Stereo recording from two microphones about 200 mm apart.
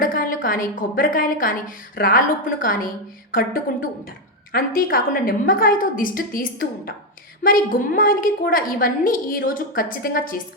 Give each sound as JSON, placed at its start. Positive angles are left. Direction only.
{"t": 0.0, "sound": "a woman's voice", "side_deg": 45}